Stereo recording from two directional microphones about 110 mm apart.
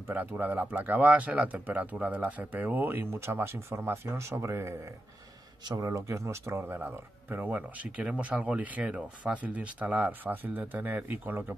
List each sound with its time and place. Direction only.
0.1 s speech: 15° right (ahead or behind)
5.8 s speech: 30° right (ahead or behind)